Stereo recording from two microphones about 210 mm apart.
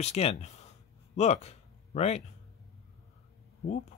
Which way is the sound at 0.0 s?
30° left (ahead or behind).